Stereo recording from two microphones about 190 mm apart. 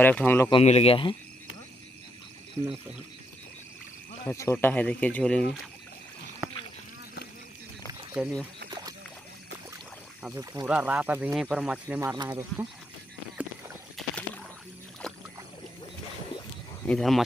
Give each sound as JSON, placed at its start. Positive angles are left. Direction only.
{"t": 0.0, "sound": "speech", "side_deg": 10}
{"t": 0.5, "sound": "speech", "side_deg": 30}
{"t": 4.2, "sound": "speech", "side_deg": 15}
{"t": 8.1, "sound": "speech", "side_deg": -10}
{"t": 8.6, "sound": "a sound", "side_deg": -20}
{"t": 10.2, "sound": "speech", "side_deg": -15}
{"t": 13.9, "sound": "rowboat", "side_deg": 5}
{"t": 16.8, "sound": "speech", "side_deg": 5}